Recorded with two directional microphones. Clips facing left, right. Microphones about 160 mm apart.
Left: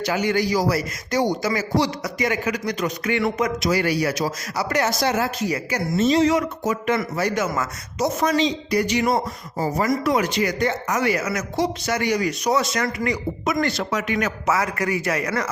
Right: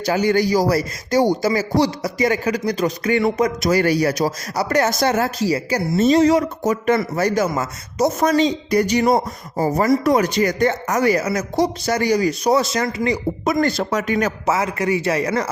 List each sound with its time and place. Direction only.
0.0 s speech: 40° right (ahead or behind)
5.4 s speech: 30° right (ahead or behind)
7.9 s speech: 45° right (ahead or behind); by 15.4 s 25° right (ahead or behind)